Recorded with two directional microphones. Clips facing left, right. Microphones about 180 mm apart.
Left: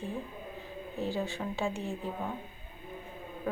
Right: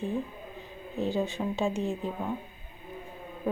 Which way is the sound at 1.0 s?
20° right (ahead or behind).